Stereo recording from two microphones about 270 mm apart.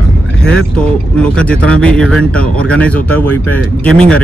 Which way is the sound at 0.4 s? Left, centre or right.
Centre.